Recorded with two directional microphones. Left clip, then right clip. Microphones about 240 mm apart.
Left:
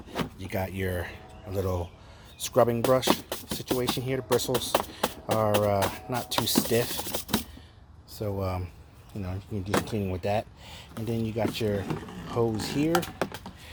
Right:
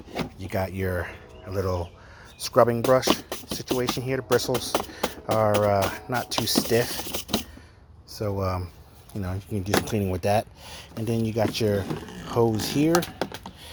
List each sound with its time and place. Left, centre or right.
0.3 s speech: centre
4.4 s speech: centre
6.2 s speech: centre
8.2 s speech: centre
9.2 s speech: right